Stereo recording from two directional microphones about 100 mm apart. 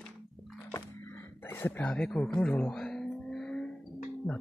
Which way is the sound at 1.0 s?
20° left (ahead or behind).